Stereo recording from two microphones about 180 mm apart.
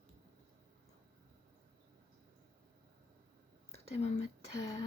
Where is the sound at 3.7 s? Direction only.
35° left (ahead or behind).